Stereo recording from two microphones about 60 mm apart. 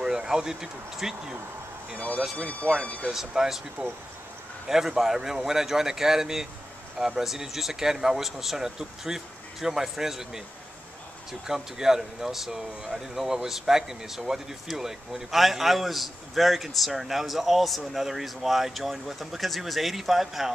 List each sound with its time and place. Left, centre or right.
0.0 s speech: centre
2.3 s speech: centre
3.1 s speech: centre
4.6 s speech: centre
11.4 s speech: centre